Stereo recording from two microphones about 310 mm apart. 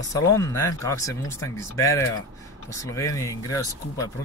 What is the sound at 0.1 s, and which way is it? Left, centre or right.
Speech, centre.